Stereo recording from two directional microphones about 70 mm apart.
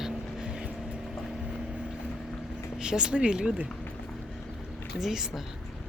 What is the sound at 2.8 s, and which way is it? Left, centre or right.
Speech, centre.